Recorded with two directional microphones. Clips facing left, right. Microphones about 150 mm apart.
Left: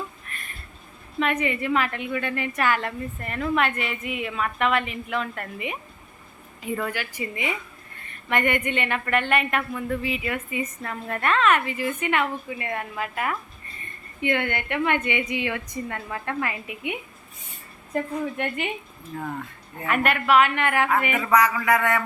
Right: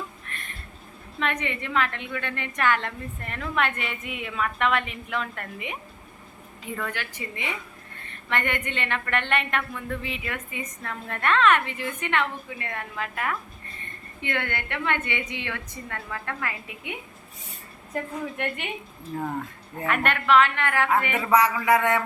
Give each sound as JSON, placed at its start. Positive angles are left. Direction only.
{"t": 0.3, "sound": "a sound", "side_deg": 5}
{"t": 1.2, "sound": "a woman's voice", "side_deg": 5}
{"t": 6.7, "sound": "a woman's voice", "side_deg": 10}
{"t": 17.9, "sound": "a woman's voice", "side_deg": 0}
{"t": 19.1, "sound": "speech", "side_deg": -30}
{"t": 19.8, "sound": "a woman's voice", "side_deg": 5}
{"t": 21.5, "sound": "speech", "side_deg": -20}